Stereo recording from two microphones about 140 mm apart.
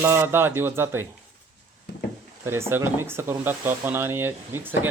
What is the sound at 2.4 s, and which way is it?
Speech, 15° right (ahead or behind).